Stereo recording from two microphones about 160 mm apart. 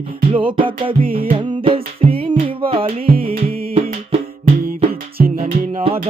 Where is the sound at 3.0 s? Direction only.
65° right (ahead or behind).